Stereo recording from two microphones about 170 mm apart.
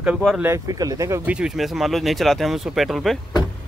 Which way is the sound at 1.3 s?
5° right (ahead or behind).